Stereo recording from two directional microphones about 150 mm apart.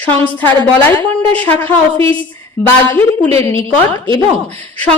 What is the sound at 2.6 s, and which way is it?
A woman's voice, 10° left (ahead or behind).